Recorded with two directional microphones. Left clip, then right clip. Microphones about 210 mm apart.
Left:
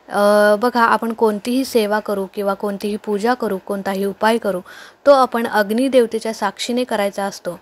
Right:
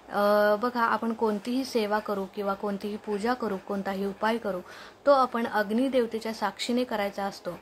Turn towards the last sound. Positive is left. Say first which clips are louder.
# left 10 dB
turn(degrees=25)  # may be behind; listen again after turning